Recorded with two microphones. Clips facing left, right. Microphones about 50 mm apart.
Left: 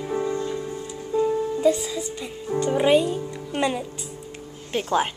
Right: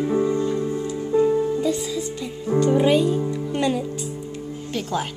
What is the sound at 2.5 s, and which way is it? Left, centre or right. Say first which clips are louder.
Music: right 2 dB; centre.